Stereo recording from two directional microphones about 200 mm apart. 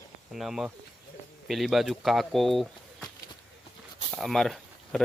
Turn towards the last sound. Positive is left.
turn(degrees=0)  # may be behind; listen again after turning